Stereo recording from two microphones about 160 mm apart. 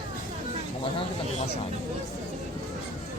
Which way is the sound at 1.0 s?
40° left (ahead or behind).